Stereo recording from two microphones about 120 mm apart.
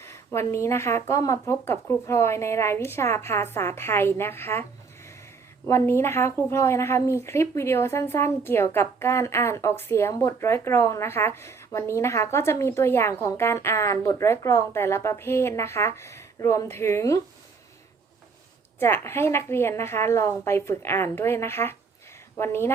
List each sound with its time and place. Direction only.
0.0 s speech: 20° left (ahead or behind)
5.6 s speech: 20° left (ahead or behind)
18.8 s speech: 20° left (ahead or behind)